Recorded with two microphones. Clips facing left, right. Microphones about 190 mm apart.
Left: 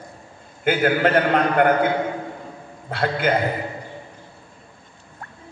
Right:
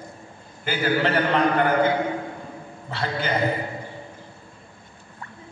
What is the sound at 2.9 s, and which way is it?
Speech, 55° left (ahead or behind).